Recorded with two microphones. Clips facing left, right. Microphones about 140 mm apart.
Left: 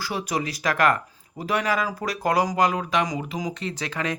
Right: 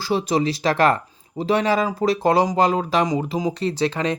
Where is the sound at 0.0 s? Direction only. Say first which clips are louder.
Right 7 dB; 25° right (ahead or behind).